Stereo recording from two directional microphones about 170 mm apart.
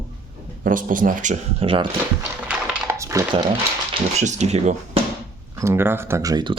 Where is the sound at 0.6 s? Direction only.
55° right (ahead or behind).